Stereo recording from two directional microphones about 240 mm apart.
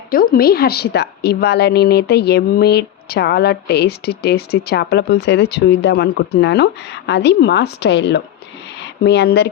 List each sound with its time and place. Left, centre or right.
0.1 s a woman's voice: left